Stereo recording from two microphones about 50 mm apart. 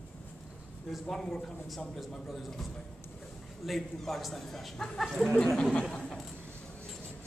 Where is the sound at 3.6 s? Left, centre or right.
Centre.